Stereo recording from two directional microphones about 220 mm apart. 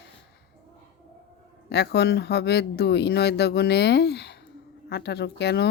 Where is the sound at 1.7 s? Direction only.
50° left (ahead or behind).